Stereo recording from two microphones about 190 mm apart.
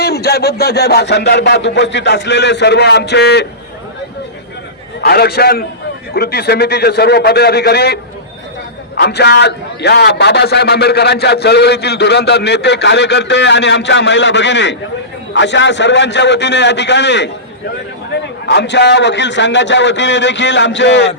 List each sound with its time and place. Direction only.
0.0 s a man's voice: 55° left (ahead or behind)
4.9 s a man's voice: 55° left (ahead or behind)
9.0 s a man's voice: 60° left (ahead or behind)
18.4 s a man's voice: 65° left (ahead or behind)